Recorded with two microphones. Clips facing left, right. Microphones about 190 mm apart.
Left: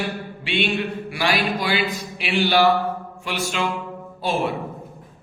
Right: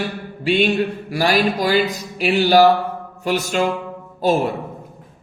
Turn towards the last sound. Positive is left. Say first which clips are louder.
# right 6 dB
turn(degrees=-40)  # may be behind; listen again after turning